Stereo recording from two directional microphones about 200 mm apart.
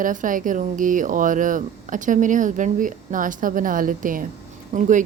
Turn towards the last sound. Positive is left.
turn(degrees=-40)  # may be behind; listen again after turning